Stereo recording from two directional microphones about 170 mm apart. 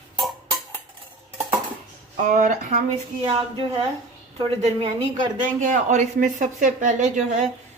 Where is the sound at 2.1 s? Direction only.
50° right (ahead or behind).